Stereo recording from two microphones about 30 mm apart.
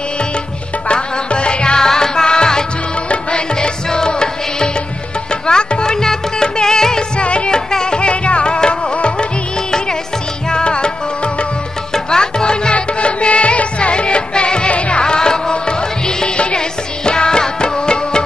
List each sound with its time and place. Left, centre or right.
0.8 s music: left
1.8 s music: centre
7.2 s music: left
7.5 s music: left
10.5 s music: left
11.9 s music: left
12.7 s music: left